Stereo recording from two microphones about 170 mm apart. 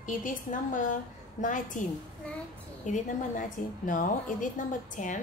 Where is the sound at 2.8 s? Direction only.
50° left (ahead or behind).